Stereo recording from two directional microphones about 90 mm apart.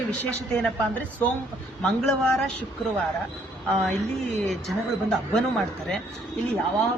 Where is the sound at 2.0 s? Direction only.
5° left (ahead or behind).